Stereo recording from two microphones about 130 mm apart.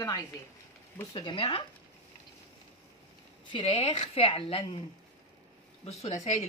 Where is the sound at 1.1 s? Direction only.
40° left (ahead or behind).